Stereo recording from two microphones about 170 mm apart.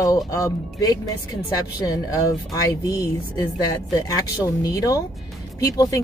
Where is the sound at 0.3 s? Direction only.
20° left (ahead or behind).